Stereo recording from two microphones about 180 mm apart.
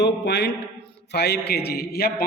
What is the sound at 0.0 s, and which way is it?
A man's voice, 70° left (ahead or behind).